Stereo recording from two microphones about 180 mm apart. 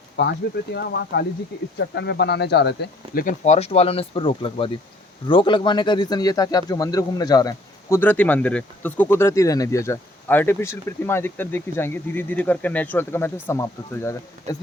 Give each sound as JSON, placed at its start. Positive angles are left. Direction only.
{"t": 0.2, "sound": "speech", "side_deg": 70}
{"t": 3.2, "sound": "speech", "side_deg": 45}